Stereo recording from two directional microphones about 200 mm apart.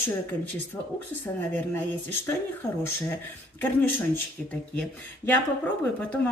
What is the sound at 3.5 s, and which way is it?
A woman's voice, 10° left (ahead or behind).